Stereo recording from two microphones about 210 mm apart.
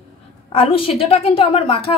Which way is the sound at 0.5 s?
25° left (ahead or behind).